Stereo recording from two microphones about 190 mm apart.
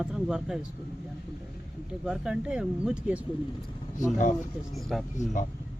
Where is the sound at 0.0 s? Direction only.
5° right (ahead or behind).